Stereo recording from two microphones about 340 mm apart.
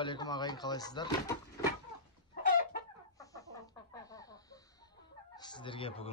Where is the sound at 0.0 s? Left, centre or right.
Centre.